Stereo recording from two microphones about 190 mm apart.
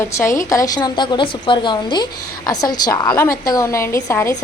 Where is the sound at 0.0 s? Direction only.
15° left (ahead or behind).